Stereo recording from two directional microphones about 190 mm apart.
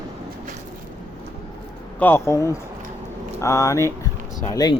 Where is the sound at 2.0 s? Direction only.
10° left (ahead or behind).